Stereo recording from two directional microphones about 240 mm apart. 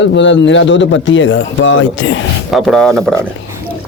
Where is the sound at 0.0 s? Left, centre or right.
Left.